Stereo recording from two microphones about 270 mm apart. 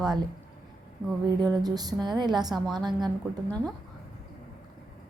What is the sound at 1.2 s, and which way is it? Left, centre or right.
A woman's voice, centre.